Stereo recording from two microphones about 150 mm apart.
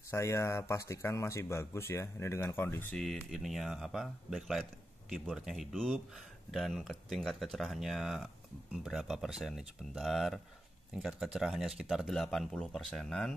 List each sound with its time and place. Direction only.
0.1 s speech: 20° left (ahead or behind)
3.0 s speech: centre (ahead or behind)